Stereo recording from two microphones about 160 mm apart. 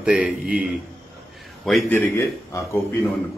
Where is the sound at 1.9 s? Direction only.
15° left (ahead or behind).